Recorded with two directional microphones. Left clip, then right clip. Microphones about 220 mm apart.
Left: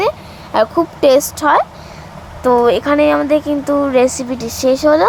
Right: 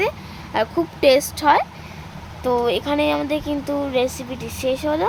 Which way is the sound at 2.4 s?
20° left (ahead or behind).